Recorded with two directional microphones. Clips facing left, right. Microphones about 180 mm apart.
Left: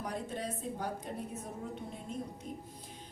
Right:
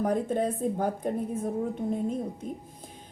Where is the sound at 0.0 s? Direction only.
50° right (ahead or behind).